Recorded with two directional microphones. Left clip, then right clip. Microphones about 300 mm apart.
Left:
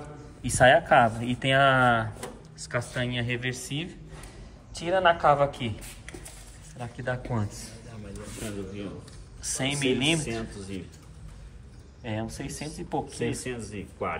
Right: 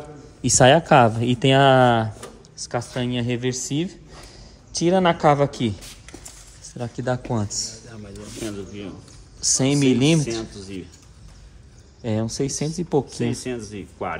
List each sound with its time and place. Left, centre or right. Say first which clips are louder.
0.4 s speech: right 4 dB; centre
6.8 s speech: right 7 dB; centre
9.4 s speech: right 9 dB; centre
12.0 s speech: right 9 dB; right